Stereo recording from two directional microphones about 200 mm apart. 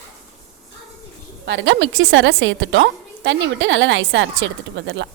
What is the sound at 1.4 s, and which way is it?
A woman's voice, 65° right (ahead or behind).